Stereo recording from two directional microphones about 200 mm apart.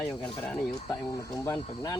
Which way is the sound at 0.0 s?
5° left (ahead or behind).